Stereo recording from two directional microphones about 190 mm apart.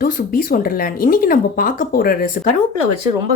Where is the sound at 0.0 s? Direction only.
45° left (ahead or behind).